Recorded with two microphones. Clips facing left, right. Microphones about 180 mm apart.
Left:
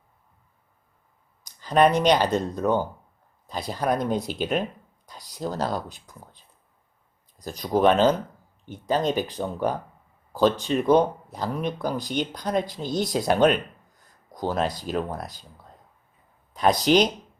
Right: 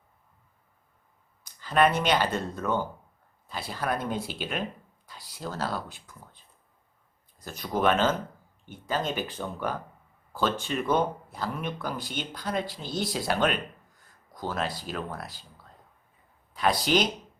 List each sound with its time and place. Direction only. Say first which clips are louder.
1.5 s speech: left 4 dB; 40° left (ahead or behind)
7.4 s speech: left 6 dB; 35° left (ahead or behind)
14.0 s a sound: left 6 dB; 40° left (ahead or behind)
14.8 s speech: left 7 dB; 40° left (ahead or behind)
16.8 s speech: left 7 dB; 45° left (ahead or behind)